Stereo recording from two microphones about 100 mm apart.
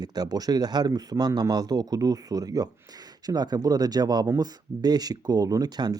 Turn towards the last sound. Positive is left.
turn(degrees=-40)  # may be behind; listen again after turning